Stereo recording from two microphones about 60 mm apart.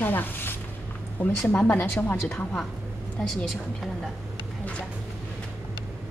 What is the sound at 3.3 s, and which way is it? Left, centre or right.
Speech, centre.